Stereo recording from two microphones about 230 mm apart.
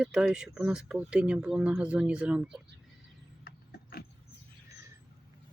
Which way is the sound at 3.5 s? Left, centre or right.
Left.